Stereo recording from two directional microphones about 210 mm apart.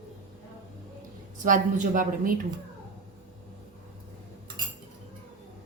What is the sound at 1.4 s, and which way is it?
Speech, 40° right (ahead or behind).